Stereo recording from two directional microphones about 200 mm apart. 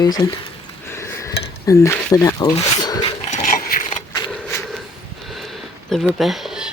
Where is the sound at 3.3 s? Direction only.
40° left (ahead or behind).